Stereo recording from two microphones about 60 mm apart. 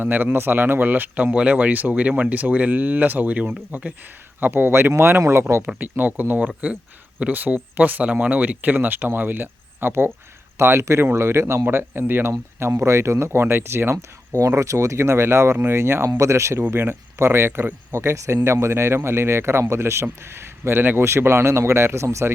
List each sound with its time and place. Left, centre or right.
0.0 s a man's voice: right
5.6 s a man's voice: right
12.5 s a man's voice: right
16.0 s speech: right
16.7 s a man's voice: right